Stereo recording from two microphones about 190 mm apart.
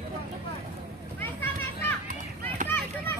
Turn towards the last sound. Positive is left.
turn(degrees=10)  # may be behind; listen again after turning